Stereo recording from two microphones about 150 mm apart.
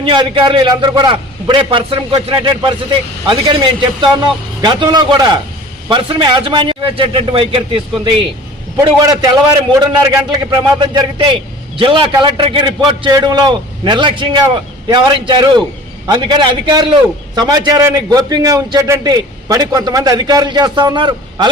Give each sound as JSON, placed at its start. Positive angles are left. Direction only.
{"t": 0.0, "sound": "a man's voice", "side_deg": -30}
{"t": 8.8, "sound": "a man's voice", "side_deg": -25}